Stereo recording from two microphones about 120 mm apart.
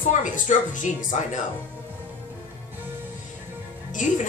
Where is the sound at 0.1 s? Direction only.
90° left.